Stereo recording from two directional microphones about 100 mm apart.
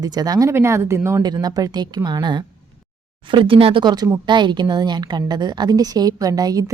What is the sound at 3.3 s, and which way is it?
Speech, 55° right (ahead or behind).